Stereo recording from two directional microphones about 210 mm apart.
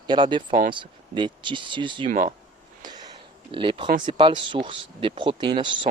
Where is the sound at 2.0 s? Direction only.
40° right (ahead or behind).